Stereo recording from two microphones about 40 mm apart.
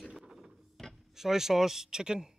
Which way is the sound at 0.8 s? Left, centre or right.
Centre.